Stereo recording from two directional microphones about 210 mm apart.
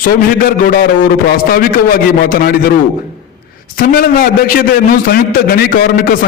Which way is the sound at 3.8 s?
45° left (ahead or behind).